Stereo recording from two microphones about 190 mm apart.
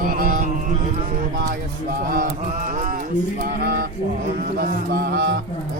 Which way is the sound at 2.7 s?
45° right (ahead or behind).